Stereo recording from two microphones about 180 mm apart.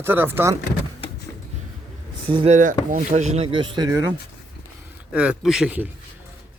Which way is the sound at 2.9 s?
40° right (ahead or behind).